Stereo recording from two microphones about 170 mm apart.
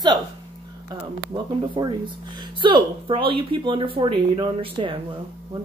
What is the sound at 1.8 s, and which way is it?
Speech, 30° right (ahead or behind).